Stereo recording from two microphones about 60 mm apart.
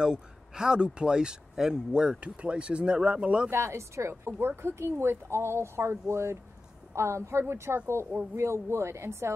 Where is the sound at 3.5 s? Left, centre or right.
Right.